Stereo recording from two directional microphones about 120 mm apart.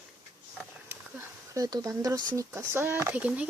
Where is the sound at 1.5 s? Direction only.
30° right (ahead or behind).